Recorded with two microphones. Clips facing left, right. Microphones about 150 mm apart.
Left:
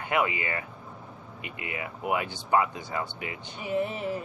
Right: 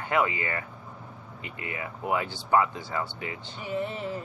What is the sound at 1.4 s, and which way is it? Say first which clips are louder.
Speech: even; 20° left (ahead or behind).